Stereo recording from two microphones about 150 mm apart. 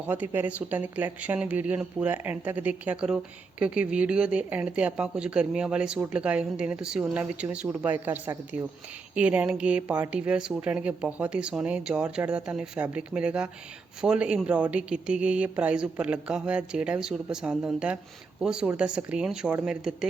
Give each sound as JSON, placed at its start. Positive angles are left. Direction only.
{"t": 0.1, "sound": "speech", "side_deg": -10}